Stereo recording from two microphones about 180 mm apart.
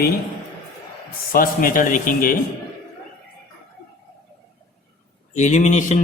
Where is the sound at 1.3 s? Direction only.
55° left (ahead or behind).